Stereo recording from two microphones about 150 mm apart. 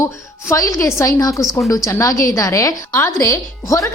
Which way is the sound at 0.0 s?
20° left (ahead or behind).